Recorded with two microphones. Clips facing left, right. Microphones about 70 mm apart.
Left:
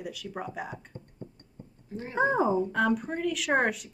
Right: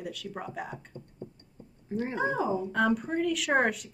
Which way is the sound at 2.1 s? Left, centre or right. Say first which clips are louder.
Left 5 dB; left.